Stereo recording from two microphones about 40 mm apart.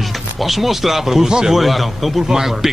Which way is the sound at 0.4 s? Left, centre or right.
Centre.